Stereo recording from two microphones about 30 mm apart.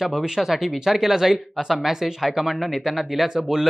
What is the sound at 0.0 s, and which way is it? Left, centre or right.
Speech, centre.